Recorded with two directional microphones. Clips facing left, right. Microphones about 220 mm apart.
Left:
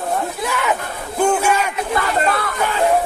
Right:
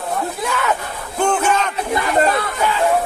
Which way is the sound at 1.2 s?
10° left (ahead or behind).